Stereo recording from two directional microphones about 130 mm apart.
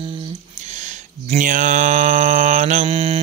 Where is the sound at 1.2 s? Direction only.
85° right; by 2.8 s 70° right (ahead or behind).